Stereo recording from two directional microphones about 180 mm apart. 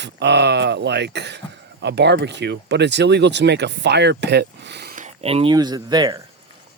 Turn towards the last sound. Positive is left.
turn(degrees=-20)  # may be behind; listen again after turning